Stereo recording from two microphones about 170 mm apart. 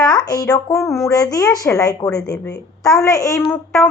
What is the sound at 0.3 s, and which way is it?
A woman's voice, 20° left (ahead or behind).